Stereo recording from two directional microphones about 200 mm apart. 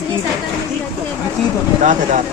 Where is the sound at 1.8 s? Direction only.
40° right (ahead or behind).